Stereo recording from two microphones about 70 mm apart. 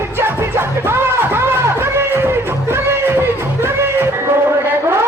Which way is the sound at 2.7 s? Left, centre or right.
Right.